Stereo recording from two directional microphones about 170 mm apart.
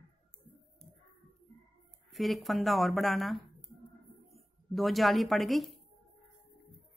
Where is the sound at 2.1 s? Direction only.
Centre (ahead or behind).